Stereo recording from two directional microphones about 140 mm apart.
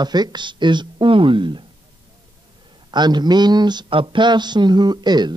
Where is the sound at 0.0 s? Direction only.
30° right (ahead or behind).